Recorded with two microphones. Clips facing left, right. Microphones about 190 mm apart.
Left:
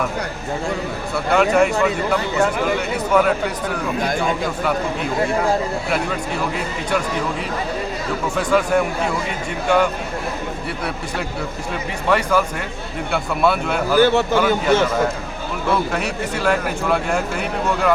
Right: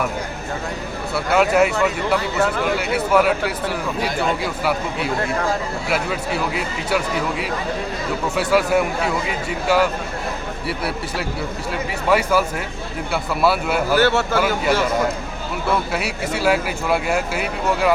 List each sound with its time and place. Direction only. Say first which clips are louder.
1.1 s speech: even; 5° right (ahead or behind)
5.9 s speech: right 4 dB; 5° right (ahead or behind)
8.4 s speech: even; 5° right (ahead or behind)
12.0 s speech: even; 5° right (ahead or behind)
13.9 s speech: left 3 dB; 15° left (ahead or behind)
14.3 s speech: left 3 dB; 10° right (ahead or behind)
15.9 s speech: left 1 dB; 10° right (ahead or behind)